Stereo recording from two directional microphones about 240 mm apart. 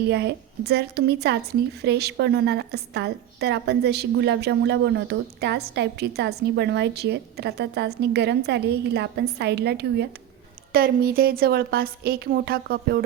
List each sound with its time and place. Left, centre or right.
0.1 s a woman's voice: right